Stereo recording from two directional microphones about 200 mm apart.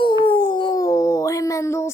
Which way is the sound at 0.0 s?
25° left (ahead or behind).